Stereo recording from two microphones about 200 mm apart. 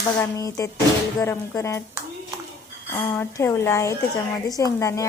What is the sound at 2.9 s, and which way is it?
Speech, 10° left (ahead or behind).